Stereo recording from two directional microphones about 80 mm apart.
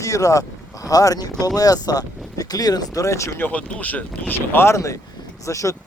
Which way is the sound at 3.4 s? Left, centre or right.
Centre.